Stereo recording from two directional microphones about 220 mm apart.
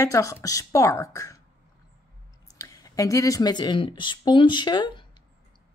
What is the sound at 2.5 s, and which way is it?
Speech, 15° left (ahead or behind).